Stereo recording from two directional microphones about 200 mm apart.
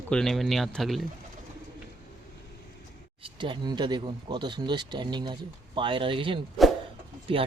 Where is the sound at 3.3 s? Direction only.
25° right (ahead or behind).